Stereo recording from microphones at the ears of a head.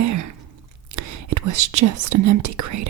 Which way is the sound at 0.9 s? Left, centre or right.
Right.